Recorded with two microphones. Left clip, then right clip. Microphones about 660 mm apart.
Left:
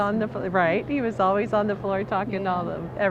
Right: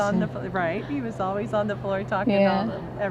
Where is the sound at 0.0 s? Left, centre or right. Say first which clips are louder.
Left 1 dB; left.